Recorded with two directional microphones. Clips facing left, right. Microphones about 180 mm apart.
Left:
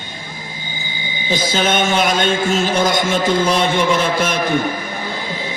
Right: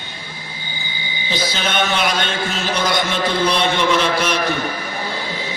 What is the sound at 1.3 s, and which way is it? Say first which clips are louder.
A man's voice: left 5 dB; 45° left (ahead or behind).